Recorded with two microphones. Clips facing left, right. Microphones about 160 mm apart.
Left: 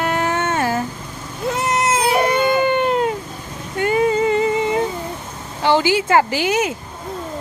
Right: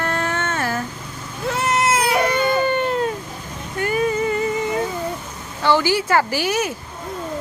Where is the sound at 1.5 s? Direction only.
20° left (ahead or behind).